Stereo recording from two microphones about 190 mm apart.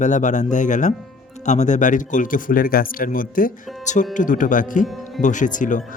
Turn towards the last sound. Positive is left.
turn(degrees=45)  # may be behind; listen again after turning